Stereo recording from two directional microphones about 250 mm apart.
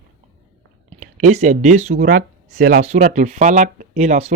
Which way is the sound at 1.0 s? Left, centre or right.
Right.